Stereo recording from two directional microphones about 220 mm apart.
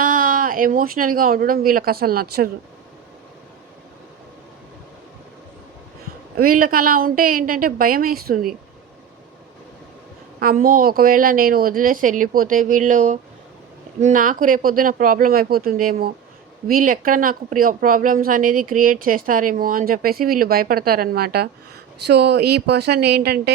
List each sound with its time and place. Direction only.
0.0 s speech: 40° right (ahead or behind)
6.3 s a woman's voice: 40° right (ahead or behind)
10.4 s a woman's voice: 40° right (ahead or behind)